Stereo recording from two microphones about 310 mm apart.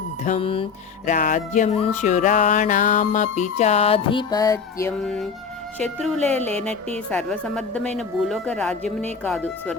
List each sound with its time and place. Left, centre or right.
0.3 s music: centre
5.8 s speech: centre